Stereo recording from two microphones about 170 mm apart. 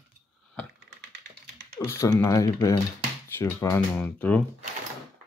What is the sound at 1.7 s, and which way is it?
Speech, 15° left (ahead or behind).